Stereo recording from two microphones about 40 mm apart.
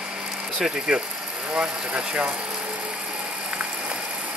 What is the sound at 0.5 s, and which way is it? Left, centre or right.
Speech, centre.